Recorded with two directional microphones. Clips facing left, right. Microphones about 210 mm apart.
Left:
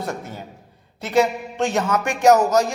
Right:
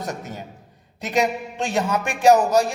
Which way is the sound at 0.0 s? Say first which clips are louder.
Left 1 dB; 15° right (ahead or behind).